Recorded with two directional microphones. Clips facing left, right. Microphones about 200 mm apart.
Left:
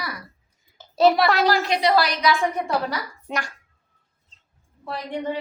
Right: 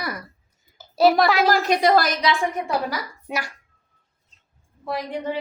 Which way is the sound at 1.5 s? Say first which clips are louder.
Right 2 dB; 45° right (ahead or behind).